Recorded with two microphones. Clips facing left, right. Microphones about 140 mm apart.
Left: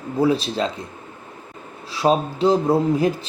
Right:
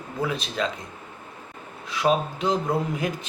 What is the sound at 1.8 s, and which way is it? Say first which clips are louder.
Speech: left 4 dB; 30° left (ahead or behind).